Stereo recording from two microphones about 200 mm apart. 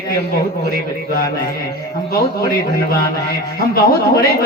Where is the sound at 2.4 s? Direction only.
45° left (ahead or behind).